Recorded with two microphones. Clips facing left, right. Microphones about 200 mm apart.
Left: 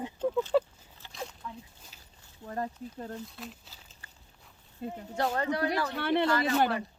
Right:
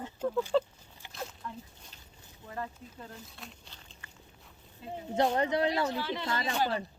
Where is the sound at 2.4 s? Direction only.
40° left (ahead or behind).